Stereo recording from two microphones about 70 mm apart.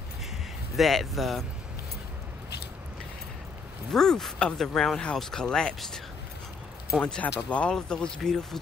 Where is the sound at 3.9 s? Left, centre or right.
Centre.